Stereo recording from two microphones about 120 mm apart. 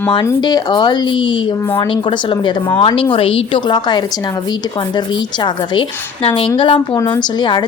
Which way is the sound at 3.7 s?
40° left (ahead or behind).